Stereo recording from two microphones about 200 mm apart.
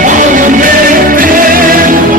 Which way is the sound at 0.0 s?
40° right (ahead or behind).